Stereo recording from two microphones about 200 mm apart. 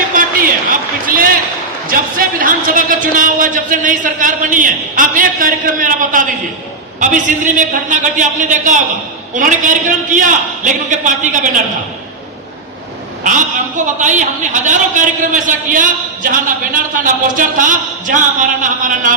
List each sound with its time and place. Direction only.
0.1 s a sound: 45° right (ahead or behind)
1.9 s a man's voice: 45° right (ahead or behind)
13.2 s a man's voice: 40° right (ahead or behind)